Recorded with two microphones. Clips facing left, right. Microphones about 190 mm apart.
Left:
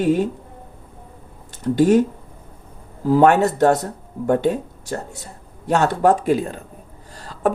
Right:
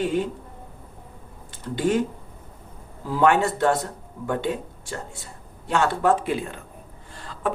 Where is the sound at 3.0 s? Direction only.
40° left (ahead or behind).